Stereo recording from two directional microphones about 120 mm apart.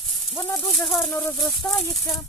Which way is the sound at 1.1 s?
15° left (ahead or behind).